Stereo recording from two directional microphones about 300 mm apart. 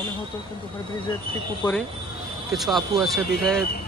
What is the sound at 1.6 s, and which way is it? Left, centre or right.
Speech, centre.